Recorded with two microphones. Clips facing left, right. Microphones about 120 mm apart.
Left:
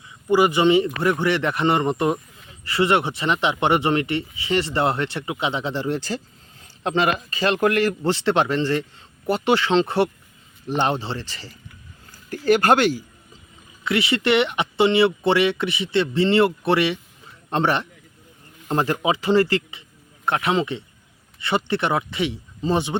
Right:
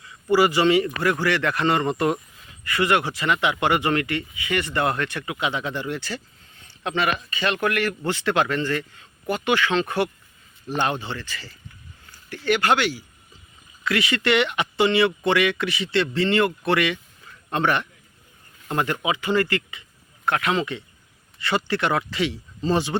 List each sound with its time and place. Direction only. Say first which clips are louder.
0.0 s speech: left 1 dB; 20° left (ahead or behind)
2.6 s speech: left 2 dB; 25° left (ahead or behind)
12.5 s speech: left 4 dB; 40° left (ahead or behind)
13.8 s speech: left 2 dB; 25° left (ahead or behind)